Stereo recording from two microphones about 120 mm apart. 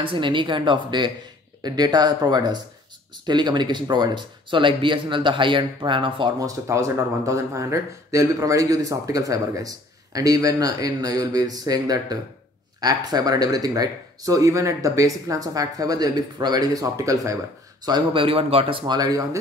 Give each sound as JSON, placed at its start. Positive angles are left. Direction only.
{"t": 0.0, "sound": "speech", "side_deg": -45}
{"t": 6.4, "sound": "a man's voice", "side_deg": -25}
{"t": 17.8, "sound": "speech", "side_deg": -40}
{"t": 18.9, "sound": "speech", "side_deg": -30}